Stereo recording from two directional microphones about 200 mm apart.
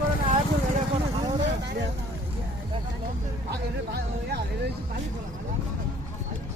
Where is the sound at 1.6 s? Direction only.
60° right (ahead or behind).